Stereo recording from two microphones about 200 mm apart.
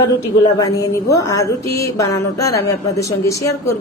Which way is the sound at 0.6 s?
15° left (ahead or behind).